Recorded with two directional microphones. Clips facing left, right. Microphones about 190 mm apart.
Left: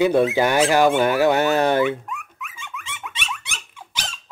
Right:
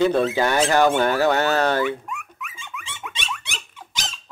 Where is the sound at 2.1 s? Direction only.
Centre (ahead or behind).